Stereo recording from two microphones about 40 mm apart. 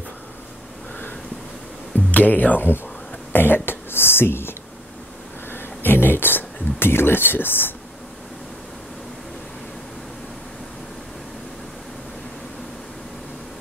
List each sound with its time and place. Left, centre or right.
2.0 s music: left
3.3 s speech: left
5.5 s speech: left